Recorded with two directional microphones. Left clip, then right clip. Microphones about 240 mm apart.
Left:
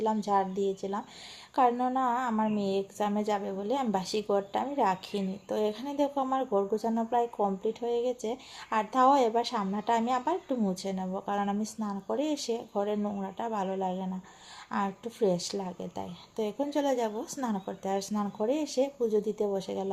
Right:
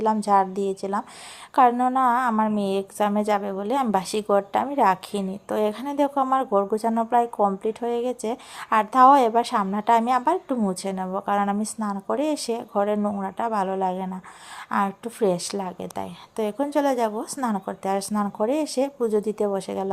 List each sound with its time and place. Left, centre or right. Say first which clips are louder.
0.0 s a woman's voice: right 8 dB; right